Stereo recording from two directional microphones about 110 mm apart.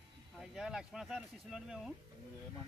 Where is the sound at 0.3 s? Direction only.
5° right (ahead or behind).